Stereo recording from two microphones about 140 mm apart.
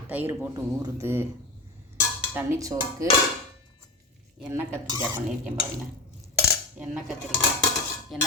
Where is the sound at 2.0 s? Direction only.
15° right (ahead or behind).